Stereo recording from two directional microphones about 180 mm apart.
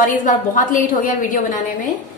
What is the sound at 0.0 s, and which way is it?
A woman's voice, 45° left (ahead or behind).